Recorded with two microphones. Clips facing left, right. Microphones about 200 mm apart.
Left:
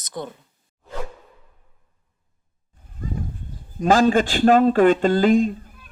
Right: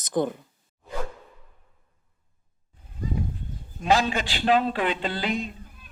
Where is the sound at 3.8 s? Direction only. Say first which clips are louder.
Left 7 dB; 50° left (ahead or behind).